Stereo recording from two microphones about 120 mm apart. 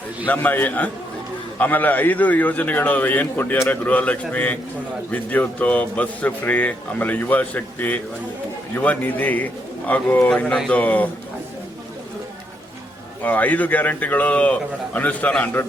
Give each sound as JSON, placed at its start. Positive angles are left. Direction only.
{"t": 0.3, "sound": "speech", "side_deg": 15}
{"t": 13.2, "sound": "speech", "side_deg": 15}